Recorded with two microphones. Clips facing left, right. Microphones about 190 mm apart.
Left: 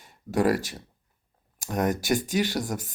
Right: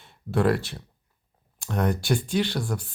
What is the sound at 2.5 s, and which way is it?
Speech, 15° left (ahead or behind).